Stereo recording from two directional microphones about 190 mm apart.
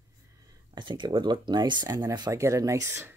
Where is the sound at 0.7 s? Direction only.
25° right (ahead or behind).